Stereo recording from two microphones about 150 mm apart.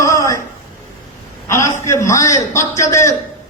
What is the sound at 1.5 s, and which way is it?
A man's voice, 20° left (ahead or behind).